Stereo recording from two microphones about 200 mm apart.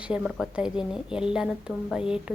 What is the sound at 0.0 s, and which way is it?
Speech, 5° right (ahead or behind).